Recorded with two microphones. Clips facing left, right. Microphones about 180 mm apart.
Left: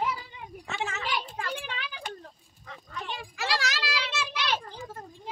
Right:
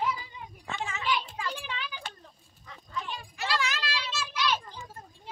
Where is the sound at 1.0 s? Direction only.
50° left (ahead or behind).